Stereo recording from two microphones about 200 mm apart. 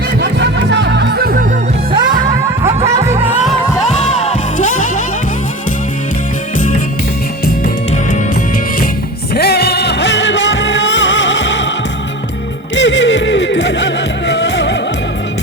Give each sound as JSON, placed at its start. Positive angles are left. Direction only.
{"t": 0.2, "sound": "music", "side_deg": -60}
{"t": 1.9, "sound": "music", "side_deg": -20}
{"t": 3.9, "sound": "music", "side_deg": 35}
{"t": 9.3, "sound": "music", "side_deg": 55}
{"t": 12.7, "sound": "music", "side_deg": 65}